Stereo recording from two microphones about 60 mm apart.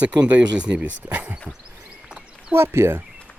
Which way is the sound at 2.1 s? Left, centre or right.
Centre.